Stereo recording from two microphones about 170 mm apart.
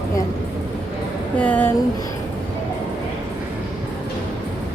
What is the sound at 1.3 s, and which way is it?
Speech, 10° left (ahead or behind).